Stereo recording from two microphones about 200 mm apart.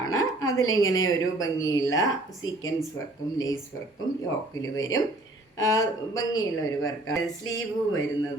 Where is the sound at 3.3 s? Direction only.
20° left (ahead or behind).